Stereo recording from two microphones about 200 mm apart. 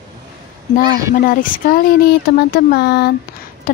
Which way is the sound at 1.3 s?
45° left (ahead or behind).